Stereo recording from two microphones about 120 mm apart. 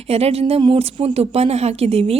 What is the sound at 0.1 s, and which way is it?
A woman's voice, 55° right (ahead or behind).